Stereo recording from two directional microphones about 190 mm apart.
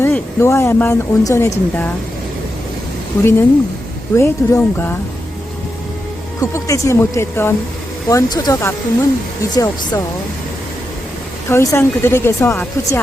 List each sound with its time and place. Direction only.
0.0 s speech: 15° left (ahead or behind)
4.1 s speech: 15° left (ahead or behind)
6.4 s speech: 15° left (ahead or behind)
11.4 s speech: 15° left (ahead or behind)